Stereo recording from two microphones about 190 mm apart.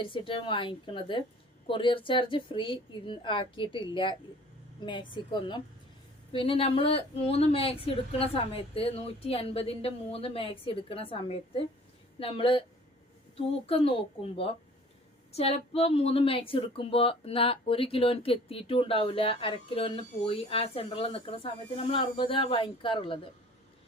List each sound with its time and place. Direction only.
0.0 s a woman's voice: 25° left (ahead or behind)